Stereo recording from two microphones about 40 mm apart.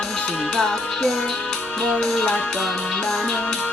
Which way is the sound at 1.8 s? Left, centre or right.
Centre.